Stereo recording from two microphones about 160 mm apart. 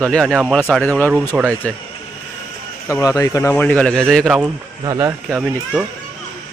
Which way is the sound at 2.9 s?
20° left (ahead or behind).